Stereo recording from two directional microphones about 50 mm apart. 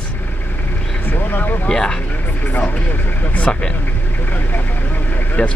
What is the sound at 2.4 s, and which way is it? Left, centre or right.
Speech, left.